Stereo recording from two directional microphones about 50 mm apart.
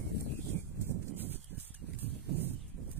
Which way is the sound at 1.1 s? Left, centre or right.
Right.